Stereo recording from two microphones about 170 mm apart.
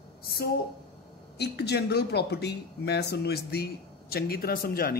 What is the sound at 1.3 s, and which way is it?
Speech, 75° left (ahead or behind).